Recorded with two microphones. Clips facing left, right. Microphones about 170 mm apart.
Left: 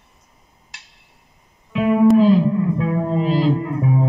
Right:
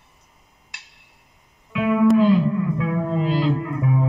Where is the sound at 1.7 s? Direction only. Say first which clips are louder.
Left 3 dB; 40° left (ahead or behind).